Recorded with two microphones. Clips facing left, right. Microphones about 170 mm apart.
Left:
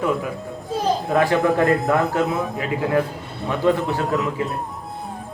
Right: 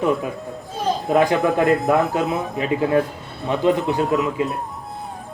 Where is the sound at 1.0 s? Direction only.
20° right (ahead or behind).